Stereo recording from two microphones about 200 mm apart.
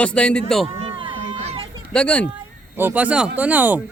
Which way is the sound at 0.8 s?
25° right (ahead or behind).